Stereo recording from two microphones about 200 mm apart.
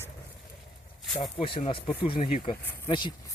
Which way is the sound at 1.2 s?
25° left (ahead or behind).